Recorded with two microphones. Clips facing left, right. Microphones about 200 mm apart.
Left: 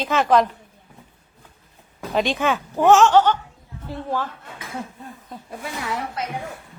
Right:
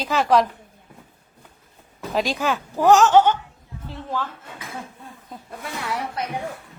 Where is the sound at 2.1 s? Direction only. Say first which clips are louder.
Left 2 dB; centre (ahead or behind).